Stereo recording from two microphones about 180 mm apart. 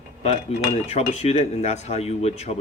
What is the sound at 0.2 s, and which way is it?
Speech, 35° left (ahead or behind).